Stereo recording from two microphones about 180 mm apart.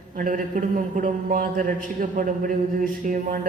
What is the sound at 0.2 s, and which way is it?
A man's voice, 50° right (ahead or behind).